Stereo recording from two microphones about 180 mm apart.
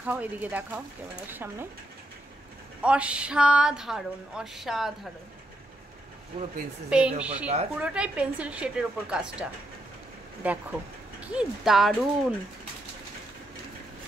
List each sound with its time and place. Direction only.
0.0 s speech: 10° right (ahead or behind)
2.8 s speech: 5° right (ahead or behind)
6.9 s speech: 5° right (ahead or behind)